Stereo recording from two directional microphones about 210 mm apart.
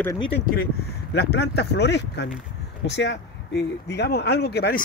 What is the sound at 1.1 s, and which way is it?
Speech, 50° left (ahead or behind).